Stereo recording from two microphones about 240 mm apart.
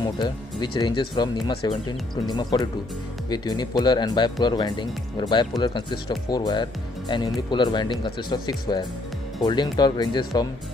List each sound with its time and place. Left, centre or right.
0.0 s speech: centre